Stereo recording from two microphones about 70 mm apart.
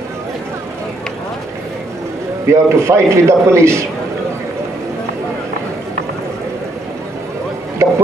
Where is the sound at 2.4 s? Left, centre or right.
Right.